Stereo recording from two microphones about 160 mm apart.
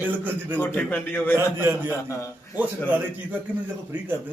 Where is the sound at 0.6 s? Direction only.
10° left (ahead or behind).